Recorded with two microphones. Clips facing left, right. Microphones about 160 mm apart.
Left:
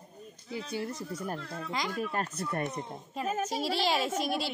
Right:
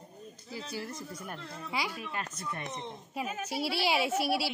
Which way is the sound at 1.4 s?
10° right (ahead or behind).